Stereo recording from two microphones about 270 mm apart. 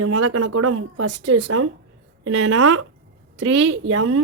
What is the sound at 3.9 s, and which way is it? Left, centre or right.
Speech, right.